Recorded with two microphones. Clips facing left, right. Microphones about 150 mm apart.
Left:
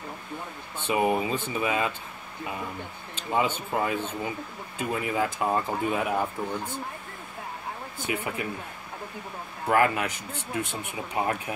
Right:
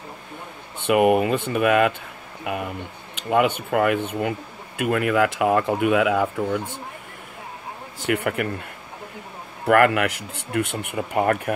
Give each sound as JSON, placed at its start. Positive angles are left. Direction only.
{"t": 0.8, "sound": "speech", "side_deg": -70}
{"t": 8.1, "sound": "speech", "side_deg": -70}
{"t": 9.7, "sound": "speech", "side_deg": -70}